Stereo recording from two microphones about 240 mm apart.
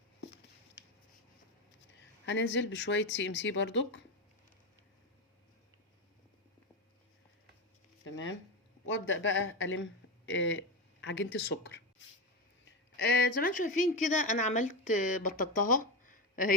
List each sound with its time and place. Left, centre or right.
2.2 s speech: left
8.0 s a sound: left
8.9 s speech: left
13.1 s speech: left